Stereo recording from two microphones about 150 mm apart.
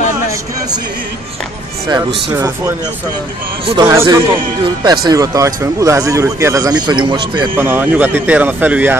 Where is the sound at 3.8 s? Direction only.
15° right (ahead or behind).